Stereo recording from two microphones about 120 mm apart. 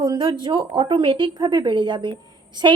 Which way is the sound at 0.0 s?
40° right (ahead or behind).